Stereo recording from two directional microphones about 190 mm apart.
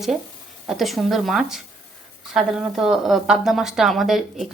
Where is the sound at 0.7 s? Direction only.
Centre (ahead or behind).